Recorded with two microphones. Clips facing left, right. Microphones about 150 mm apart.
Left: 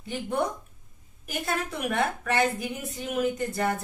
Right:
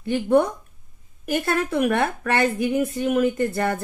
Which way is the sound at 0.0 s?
65° right (ahead or behind).